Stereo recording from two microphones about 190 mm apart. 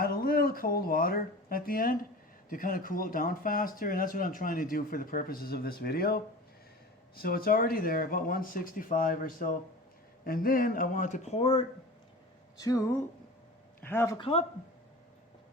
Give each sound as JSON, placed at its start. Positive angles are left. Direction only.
{"t": 0.0, "sound": "speech", "side_deg": 50}
{"t": 7.2, "sound": "speech", "side_deg": 50}
{"t": 12.5, "sound": "speech", "side_deg": 20}
{"t": 13.8, "sound": "speech", "side_deg": 10}
{"t": 14.2, "sound": "speech", "side_deg": 30}